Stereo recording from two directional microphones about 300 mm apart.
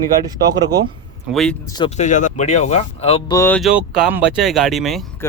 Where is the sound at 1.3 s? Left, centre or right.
Centre.